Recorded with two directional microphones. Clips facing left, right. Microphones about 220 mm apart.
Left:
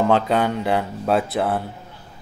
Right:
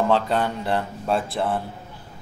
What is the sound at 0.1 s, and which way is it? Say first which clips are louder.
Speech: left 3 dB; centre (ahead or behind).